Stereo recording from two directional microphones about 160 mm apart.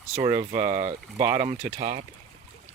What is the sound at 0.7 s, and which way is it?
Speech, 25° right (ahead or behind).